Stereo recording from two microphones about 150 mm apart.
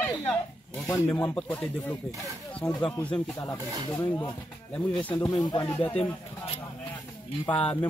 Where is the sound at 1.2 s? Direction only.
10° left (ahead or behind).